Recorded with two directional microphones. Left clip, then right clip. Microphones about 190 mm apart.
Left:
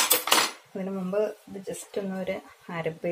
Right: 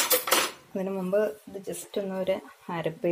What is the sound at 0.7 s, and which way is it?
Speech, 45° right (ahead or behind).